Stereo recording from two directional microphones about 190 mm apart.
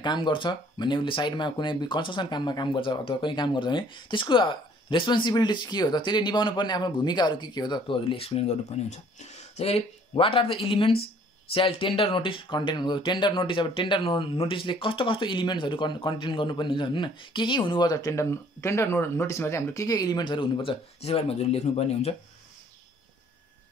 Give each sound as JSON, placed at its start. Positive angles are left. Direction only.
{"t": 0.0, "sound": "speech", "side_deg": 25}